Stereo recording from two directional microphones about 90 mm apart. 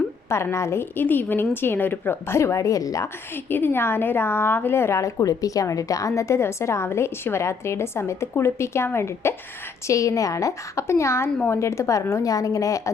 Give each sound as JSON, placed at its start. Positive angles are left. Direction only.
{"t": 0.3, "sound": "a woman's voice", "side_deg": 30}
{"t": 3.3, "sound": "a woman's voice", "side_deg": 25}